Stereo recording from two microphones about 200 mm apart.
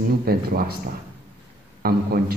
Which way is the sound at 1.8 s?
50° right (ahead or behind).